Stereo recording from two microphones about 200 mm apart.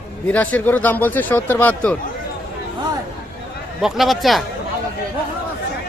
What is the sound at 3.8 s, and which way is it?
Speech, centre (ahead or behind).